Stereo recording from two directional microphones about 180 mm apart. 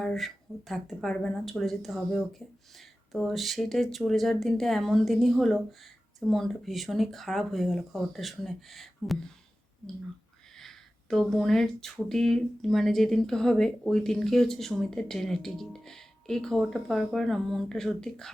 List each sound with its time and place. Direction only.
0.0 s speech: centre (ahead or behind)
10.6 s speech: centre (ahead or behind)